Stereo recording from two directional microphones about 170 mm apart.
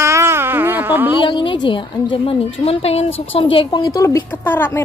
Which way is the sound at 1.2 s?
30° left (ahead or behind).